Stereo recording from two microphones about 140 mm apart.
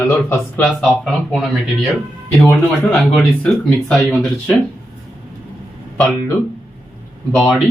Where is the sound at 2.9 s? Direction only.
Centre (ahead or behind).